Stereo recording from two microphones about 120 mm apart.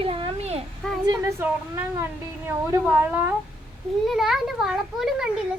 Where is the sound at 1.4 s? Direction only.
20° right (ahead or behind).